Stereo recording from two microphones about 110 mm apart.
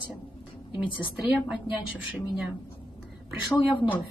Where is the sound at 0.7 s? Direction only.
5° right (ahead or behind).